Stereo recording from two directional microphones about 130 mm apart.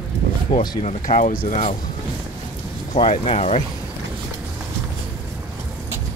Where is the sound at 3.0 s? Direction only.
55° left (ahead or behind).